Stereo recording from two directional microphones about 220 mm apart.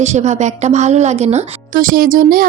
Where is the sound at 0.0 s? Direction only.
30° right (ahead or behind).